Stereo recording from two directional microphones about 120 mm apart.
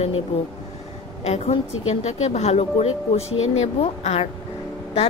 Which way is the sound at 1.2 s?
60° left (ahead or behind).